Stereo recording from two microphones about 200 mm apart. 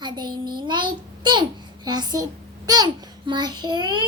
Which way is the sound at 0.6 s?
25° right (ahead or behind).